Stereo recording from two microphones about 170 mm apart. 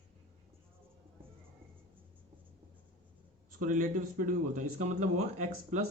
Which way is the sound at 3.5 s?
50° right (ahead or behind).